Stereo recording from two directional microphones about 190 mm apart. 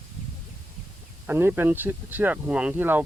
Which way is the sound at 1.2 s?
10° right (ahead or behind).